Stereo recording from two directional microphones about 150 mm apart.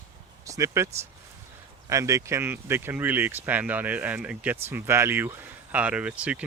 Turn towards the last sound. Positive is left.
turn(degrees=-5)  # may be behind; listen again after turning